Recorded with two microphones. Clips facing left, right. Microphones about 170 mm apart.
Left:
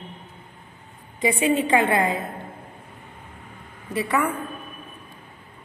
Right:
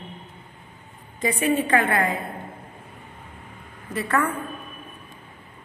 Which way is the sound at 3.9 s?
15° left (ahead or behind).